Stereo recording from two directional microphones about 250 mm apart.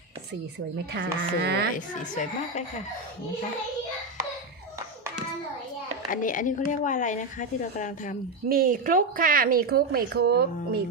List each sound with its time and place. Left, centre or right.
0.9 s a woman's voice: right
1.7 s a woman's voice: left
6.1 s a woman's voice: left
8.4 s a woman's voice: right